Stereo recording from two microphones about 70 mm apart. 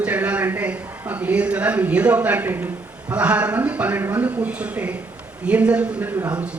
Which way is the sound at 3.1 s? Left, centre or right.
Centre.